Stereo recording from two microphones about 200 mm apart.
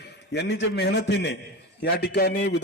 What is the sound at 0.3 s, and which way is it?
A man's voice, 60° left (ahead or behind).